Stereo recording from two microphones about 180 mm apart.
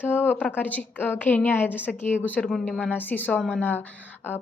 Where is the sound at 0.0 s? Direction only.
10° left (ahead or behind).